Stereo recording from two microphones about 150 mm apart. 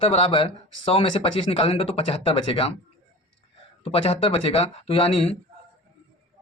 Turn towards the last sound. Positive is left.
turn(degrees=40)  # may be behind; listen again after turning